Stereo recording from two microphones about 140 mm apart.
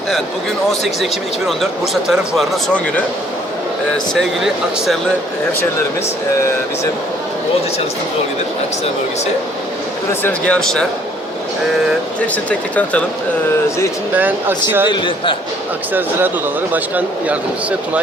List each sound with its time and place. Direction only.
1.5 s speech: centre (ahead or behind)
3.9 s speech: centre (ahead or behind)
10.1 s speech: 10° left (ahead or behind)
12.5 s speech: 10° left (ahead or behind)
14.2 s speech: 15° right (ahead or behind)
14.8 s a man's voice: 35° left (ahead or behind)
15.9 s speech: 15° right (ahead or behind)